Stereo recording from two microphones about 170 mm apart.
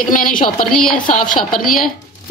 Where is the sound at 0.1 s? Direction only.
50° left (ahead or behind).